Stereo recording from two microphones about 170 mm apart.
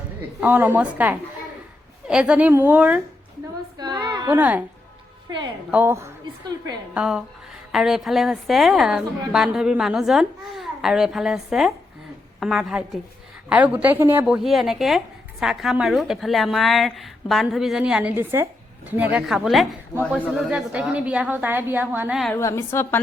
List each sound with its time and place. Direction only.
0.3 s a woman's voice: 10° right (ahead or behind)
3.9 s a sound: 20° right (ahead or behind)
4.3 s a woman's voice: 10° right (ahead or behind)
5.7 s a woman's voice: 15° right (ahead or behind)
22.4 s a woman's voice: 15° left (ahead or behind)